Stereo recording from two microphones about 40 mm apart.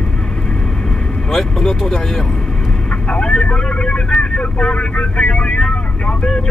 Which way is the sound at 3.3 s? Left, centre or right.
Left.